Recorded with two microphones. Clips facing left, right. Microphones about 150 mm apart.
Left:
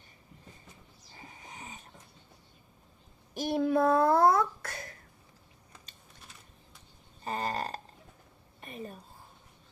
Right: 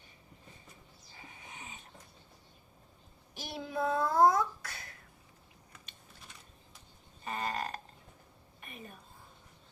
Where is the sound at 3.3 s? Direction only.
50° left (ahead or behind).